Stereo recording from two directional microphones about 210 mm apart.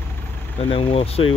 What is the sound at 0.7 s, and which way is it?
Speech, 25° left (ahead or behind).